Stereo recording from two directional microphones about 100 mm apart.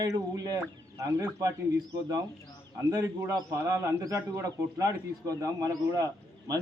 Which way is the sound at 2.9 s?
35° right (ahead or behind).